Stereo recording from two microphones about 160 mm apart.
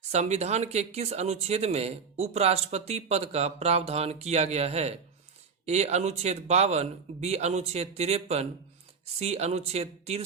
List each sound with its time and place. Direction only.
0.0 s speech: 45° right (ahead or behind)